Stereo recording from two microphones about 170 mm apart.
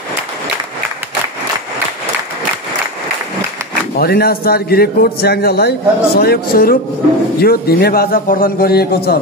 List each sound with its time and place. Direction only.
3.9 s a man's voice: 65° left (ahead or behind)